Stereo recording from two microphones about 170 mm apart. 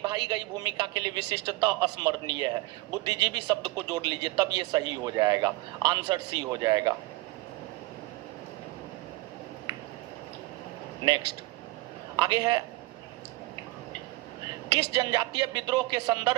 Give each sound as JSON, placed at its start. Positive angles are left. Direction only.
{"t": 0.0, "sound": "speech", "side_deg": -25}
{"t": 12.1, "sound": "a man's voice", "side_deg": -25}
{"t": 14.7, "sound": "speech", "side_deg": -25}